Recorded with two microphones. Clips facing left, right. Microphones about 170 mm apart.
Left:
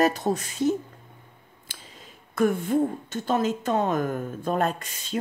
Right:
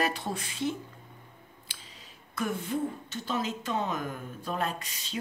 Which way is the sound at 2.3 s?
50° left (ahead or behind).